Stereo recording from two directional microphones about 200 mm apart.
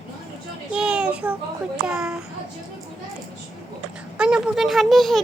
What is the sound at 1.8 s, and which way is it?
Speech, 5° right (ahead or behind).